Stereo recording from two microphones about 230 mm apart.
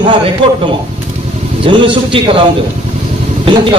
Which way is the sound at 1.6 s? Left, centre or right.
Right.